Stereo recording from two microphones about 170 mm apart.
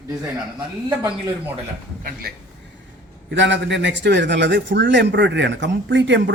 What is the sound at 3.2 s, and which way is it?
A man's voice, 90° right.